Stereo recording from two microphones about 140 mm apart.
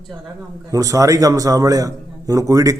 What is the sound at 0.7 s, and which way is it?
Speech, 25° right (ahead or behind).